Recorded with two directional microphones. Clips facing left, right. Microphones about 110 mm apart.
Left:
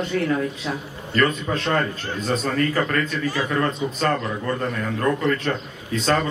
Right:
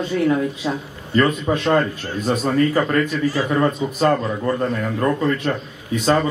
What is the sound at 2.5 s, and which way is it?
A man's voice, 15° right (ahead or behind).